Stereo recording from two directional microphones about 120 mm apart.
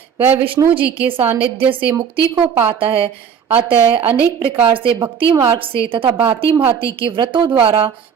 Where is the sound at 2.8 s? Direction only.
50° right (ahead or behind).